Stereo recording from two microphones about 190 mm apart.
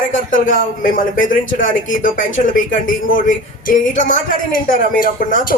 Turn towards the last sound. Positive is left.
turn(degrees=45)  # may be behind; listen again after turning